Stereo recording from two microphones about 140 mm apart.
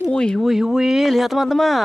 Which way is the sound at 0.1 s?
5° left (ahead or behind).